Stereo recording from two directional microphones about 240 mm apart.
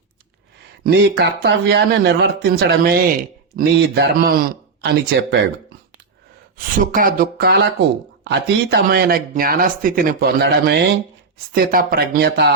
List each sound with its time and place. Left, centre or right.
0.9 s speech: right
6.7 s speech: right